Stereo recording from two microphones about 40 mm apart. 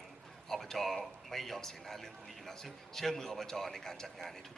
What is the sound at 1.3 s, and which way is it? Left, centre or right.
A man's voice, centre.